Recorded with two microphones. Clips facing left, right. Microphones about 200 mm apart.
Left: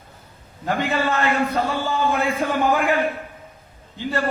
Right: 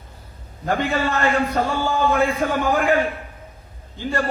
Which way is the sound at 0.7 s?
50° right (ahead or behind).